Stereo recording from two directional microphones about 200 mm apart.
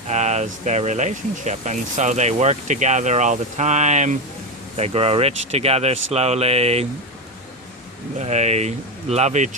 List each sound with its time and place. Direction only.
0.1 s speech: 35° right (ahead or behind)
8.2 s speech: 35° right (ahead or behind)